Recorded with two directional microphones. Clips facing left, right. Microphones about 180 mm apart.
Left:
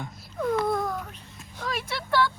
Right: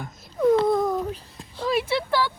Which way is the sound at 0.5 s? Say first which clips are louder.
Right 4 dB; 25° right (ahead or behind).